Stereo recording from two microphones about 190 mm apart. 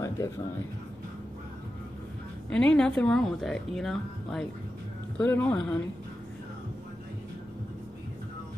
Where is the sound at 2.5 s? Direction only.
5° left (ahead or behind).